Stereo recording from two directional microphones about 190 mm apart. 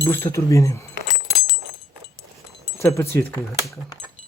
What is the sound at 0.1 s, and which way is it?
Speech, 15° left (ahead or behind).